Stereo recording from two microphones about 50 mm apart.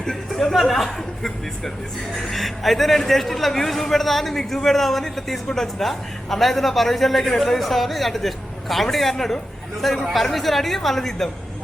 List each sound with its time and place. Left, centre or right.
0.3 s a man's voice: centre